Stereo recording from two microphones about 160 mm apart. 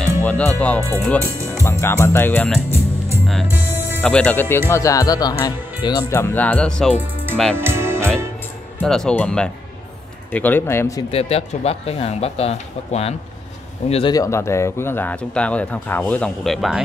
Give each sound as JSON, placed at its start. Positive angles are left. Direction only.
{"t": 0.0, "sound": "music", "side_deg": 10}
{"t": 0.6, "sound": "speech", "side_deg": 10}
{"t": 3.4, "sound": "music", "side_deg": -15}
{"t": 4.0, "sound": "speech", "side_deg": 5}
{"t": 7.5, "sound": "music", "side_deg": -15}
{"t": 8.8, "sound": "speech", "side_deg": 5}
{"t": 11.1, "sound": "speech", "side_deg": 40}
{"t": 14.1, "sound": "speech", "side_deg": 20}